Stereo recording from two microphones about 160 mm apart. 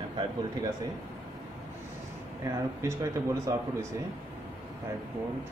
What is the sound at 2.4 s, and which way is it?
Speech, 20° right (ahead or behind).